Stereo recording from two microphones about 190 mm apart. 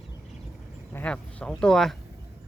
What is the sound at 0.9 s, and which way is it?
Speech, 5° left (ahead or behind).